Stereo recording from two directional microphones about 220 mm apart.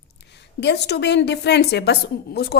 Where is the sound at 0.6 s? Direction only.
50° left (ahead or behind).